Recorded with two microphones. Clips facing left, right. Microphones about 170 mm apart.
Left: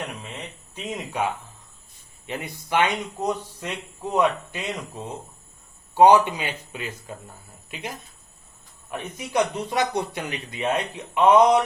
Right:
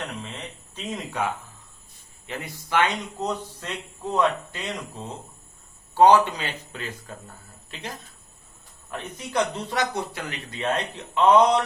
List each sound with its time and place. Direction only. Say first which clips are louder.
0.8 s speech: left 1 dB; 15° left (ahead or behind)